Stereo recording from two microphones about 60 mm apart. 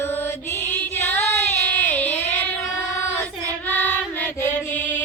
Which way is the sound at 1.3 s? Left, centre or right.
Left.